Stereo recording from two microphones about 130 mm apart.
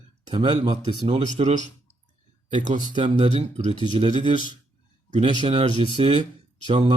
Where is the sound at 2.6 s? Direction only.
70° right (ahead or behind).